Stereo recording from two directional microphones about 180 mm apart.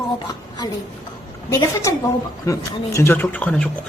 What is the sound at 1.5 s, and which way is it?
Speech, 20° left (ahead or behind).